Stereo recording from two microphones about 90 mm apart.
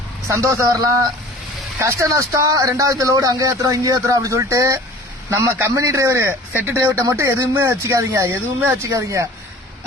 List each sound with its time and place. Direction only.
0.3 s a man's voice: 35° right (ahead or behind)